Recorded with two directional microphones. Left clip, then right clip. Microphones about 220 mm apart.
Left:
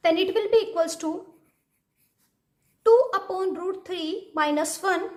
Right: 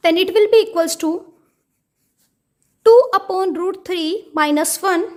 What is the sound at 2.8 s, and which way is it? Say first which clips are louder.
A woman's voice: right 8 dB; 40° right (ahead or behind).